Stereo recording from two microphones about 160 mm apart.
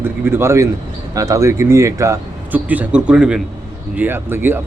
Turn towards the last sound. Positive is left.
turn(degrees=-15)  # may be behind; listen again after turning